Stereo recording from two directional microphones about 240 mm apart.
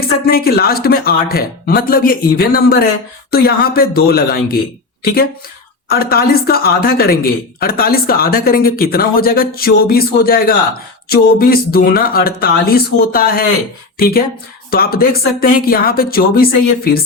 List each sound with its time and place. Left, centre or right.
0.0 s speech: left
5.9 s speech: left
14.7 s speech: left